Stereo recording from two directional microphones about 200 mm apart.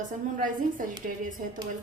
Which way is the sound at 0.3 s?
40° right (ahead or behind).